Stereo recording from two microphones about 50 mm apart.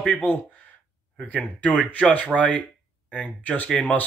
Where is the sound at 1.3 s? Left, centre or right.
Left.